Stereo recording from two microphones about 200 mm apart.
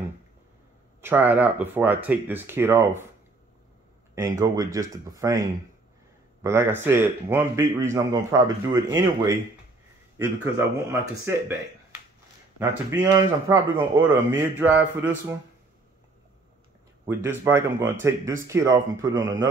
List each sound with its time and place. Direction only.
1.0 s speech: 10° right (ahead or behind)
4.1 s speech: 15° right (ahead or behind)
12.5 s speech: 10° right (ahead or behind)
17.1 s speech: 10° right (ahead or behind)